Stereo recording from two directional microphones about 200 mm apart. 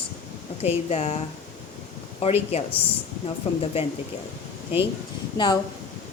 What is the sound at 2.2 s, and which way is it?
Speech, 30° left (ahead or behind).